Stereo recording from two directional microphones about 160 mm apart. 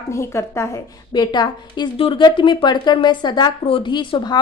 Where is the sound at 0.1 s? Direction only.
15° left (ahead or behind).